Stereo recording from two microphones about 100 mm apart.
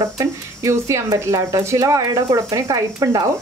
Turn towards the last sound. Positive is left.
turn(degrees=-40)  # may be behind; listen again after turning